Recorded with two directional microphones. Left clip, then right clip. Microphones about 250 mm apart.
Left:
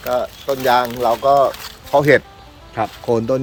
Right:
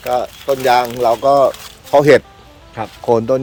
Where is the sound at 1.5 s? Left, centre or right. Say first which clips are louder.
Right 2 dB; centre.